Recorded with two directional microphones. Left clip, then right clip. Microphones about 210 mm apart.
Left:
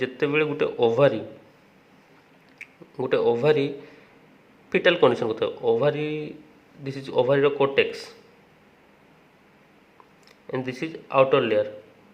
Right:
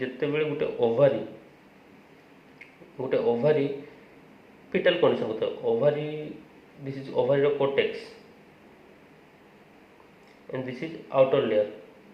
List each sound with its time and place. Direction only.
0.0 s speech: 45° left (ahead or behind)
2.6 s speech: 45° left (ahead or behind)
4.7 s speech: 45° left (ahead or behind)
10.5 s speech: 45° left (ahead or behind)